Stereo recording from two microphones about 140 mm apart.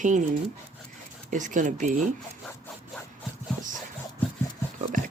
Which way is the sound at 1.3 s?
65° right (ahead or behind).